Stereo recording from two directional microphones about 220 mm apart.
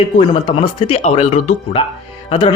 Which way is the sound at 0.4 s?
20° left (ahead or behind).